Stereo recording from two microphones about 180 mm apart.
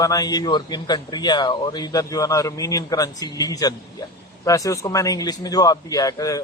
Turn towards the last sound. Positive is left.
turn(degrees=20)  # may be behind; listen again after turning